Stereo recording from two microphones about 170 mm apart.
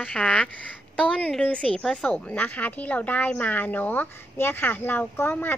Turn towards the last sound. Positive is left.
turn(degrees=10)  # may be behind; listen again after turning